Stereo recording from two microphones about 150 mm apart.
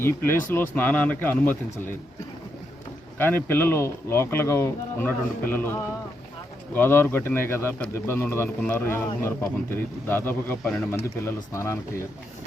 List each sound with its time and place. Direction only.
0.0 s speech: 15° left (ahead or behind)
3.2 s speech: 15° left (ahead or behind)
6.7 s speech: 15° left (ahead or behind)